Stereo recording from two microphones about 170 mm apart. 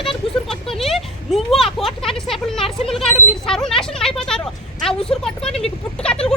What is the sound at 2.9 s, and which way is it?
Speech, centre (ahead or behind).